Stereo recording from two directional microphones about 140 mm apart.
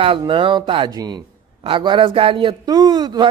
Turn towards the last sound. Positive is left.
turn(degrees=-30)  # may be behind; listen again after turning